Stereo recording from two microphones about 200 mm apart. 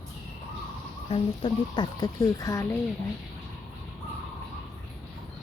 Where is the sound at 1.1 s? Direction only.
25° left (ahead or behind).